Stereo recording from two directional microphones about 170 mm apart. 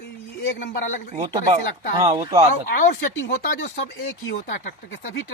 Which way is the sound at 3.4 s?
50° left (ahead or behind).